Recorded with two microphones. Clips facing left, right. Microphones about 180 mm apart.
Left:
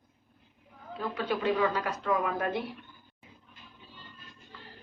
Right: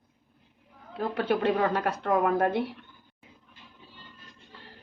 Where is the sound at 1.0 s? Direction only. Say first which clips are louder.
Right 5 dB; 60° right (ahead or behind).